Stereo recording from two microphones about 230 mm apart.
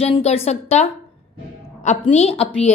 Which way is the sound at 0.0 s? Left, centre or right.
Left.